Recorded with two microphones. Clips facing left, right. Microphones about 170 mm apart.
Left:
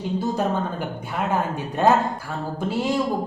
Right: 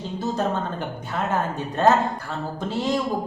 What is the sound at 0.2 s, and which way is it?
A woman's voice, 10° left (ahead or behind).